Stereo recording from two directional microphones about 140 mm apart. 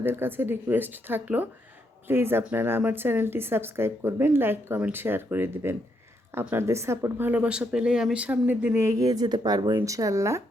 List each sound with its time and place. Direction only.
0.0 s a woman's voice: 15° right (ahead or behind)